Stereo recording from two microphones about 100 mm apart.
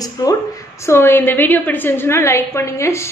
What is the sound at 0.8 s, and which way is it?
A woman's voice, 25° left (ahead or behind).